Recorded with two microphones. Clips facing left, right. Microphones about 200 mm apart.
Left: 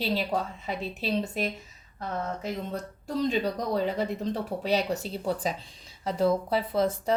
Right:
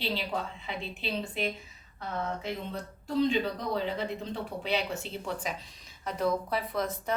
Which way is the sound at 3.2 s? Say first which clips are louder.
Even; 40° left (ahead or behind).